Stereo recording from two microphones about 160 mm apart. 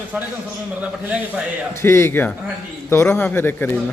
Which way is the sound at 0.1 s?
10° right (ahead or behind).